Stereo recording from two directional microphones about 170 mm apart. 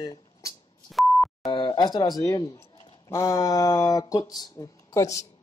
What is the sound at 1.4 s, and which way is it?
Speech, 25° left (ahead or behind).